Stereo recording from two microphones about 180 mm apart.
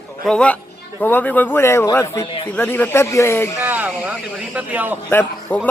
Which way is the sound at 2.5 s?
10° left (ahead or behind).